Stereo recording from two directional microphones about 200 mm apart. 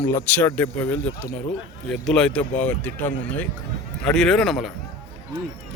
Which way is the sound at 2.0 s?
5° left (ahead or behind).